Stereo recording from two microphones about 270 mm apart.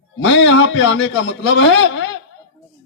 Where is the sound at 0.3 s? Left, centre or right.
Left.